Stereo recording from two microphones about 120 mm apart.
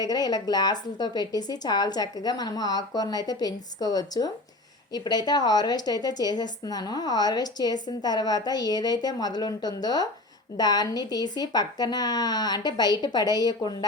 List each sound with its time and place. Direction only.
0.0 s a woman's voice: 35° left (ahead or behind)